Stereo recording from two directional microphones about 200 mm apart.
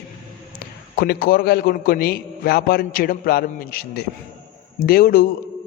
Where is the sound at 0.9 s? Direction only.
45° left (ahead or behind).